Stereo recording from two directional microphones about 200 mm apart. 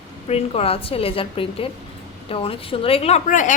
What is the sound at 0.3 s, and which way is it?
A woman's voice, 30° left (ahead or behind).